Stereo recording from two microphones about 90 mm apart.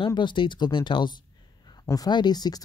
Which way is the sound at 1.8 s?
45° left (ahead or behind).